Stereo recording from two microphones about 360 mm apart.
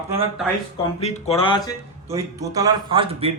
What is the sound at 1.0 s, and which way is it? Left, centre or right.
Speech, centre.